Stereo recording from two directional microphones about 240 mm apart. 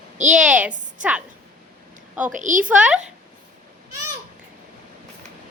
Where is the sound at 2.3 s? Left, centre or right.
Right.